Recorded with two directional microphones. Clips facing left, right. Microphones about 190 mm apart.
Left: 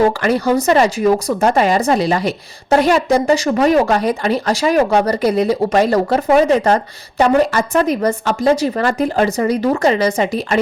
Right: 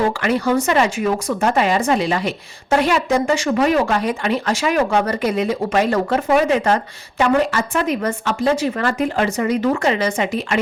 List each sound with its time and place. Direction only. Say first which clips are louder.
0.2 s speech: left 3 dB; 40° left (ahead or behind)